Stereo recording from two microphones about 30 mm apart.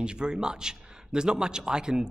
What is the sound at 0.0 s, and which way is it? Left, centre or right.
A man's voice, right.